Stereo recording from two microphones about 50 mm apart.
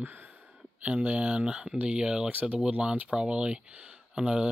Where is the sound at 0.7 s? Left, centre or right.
Right.